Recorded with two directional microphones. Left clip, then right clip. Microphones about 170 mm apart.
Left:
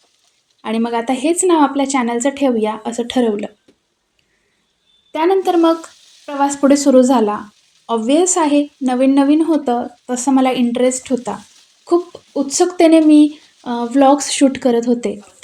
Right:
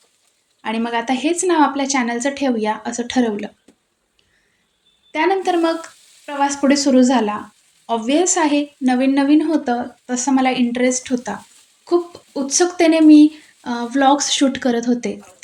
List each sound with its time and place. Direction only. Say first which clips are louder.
0.6 s a woman's voice: left 2 dB; 35° left (ahead or behind)
5.1 s a woman's voice: left 3 dB; 40° left (ahead or behind)